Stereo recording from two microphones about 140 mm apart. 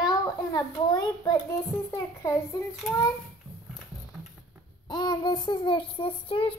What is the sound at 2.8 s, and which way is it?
Speech, centre (ahead or behind).